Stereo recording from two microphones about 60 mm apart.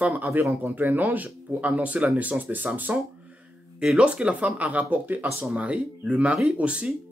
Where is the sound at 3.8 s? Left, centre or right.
Centre.